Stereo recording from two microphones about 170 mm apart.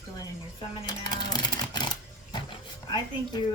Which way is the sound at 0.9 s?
25° left (ahead or behind).